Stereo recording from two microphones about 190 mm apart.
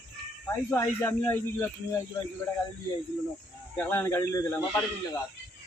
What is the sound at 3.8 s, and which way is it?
Speech, 10° left (ahead or behind).